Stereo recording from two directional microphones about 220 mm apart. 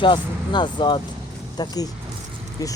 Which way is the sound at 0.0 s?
20° left (ahead or behind).